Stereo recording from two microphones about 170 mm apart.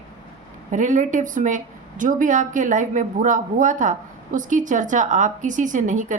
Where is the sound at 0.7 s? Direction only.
50° right (ahead or behind).